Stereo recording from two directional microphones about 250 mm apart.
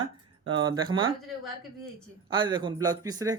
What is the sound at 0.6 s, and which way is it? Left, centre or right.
Speech, centre.